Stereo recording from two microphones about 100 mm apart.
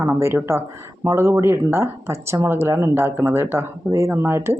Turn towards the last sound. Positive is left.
turn(degrees=-25)  # may be behind; listen again after turning